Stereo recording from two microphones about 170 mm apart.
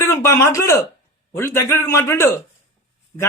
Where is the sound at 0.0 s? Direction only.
15° left (ahead or behind).